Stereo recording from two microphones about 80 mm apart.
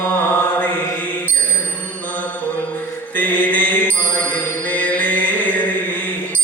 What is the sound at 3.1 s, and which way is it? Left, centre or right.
Mantra, left.